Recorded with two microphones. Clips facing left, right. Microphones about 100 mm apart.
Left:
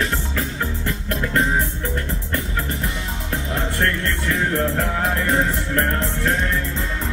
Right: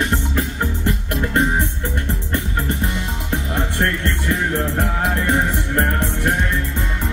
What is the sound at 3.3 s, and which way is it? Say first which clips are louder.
Music: right 2 dB; 25° right (ahead or behind).